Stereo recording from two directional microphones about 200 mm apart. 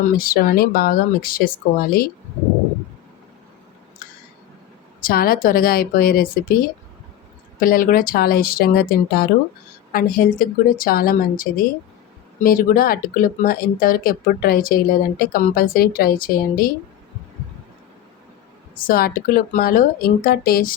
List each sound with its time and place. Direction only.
0.2 s speech: 45° left (ahead or behind)
5.0 s speech: 50° left (ahead or behind)
7.6 s speech: 45° left (ahead or behind)
18.8 s speech: 45° left (ahead or behind)